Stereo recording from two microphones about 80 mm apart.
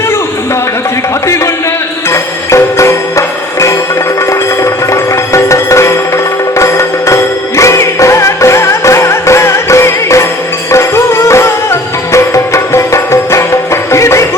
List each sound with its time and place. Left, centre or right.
2.0 s music: left